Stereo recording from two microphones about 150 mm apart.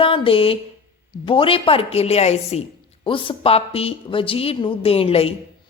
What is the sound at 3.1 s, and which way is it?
A woman's voice, 35° left (ahead or behind).